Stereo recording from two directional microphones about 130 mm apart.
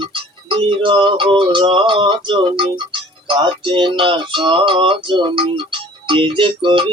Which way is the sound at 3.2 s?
40° right (ahead or behind).